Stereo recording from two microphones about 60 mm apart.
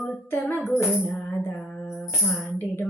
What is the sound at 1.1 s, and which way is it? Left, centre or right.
Music, left.